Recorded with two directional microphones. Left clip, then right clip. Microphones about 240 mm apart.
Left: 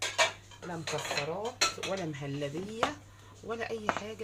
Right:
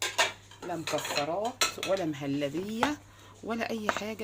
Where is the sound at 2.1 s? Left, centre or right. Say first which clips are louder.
Right 5 dB; right.